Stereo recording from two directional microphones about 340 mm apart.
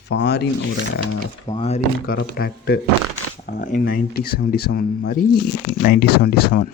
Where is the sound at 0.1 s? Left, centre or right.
Left.